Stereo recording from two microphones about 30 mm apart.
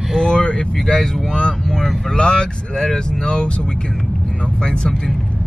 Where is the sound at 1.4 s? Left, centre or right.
Left.